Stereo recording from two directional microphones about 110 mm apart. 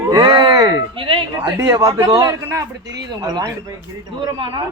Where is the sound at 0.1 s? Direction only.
40° right (ahead or behind).